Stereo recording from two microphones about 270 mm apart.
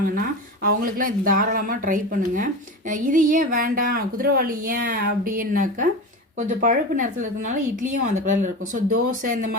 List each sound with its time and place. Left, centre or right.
0.0 s a woman's voice: right